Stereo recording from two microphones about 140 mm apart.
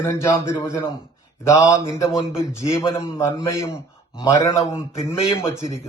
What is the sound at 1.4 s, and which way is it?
A man's voice, 25° left (ahead or behind).